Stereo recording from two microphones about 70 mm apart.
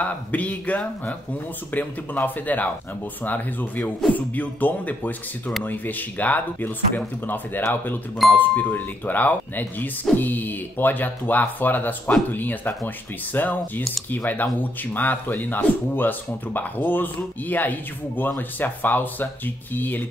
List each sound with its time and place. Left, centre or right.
0.0 s speech: left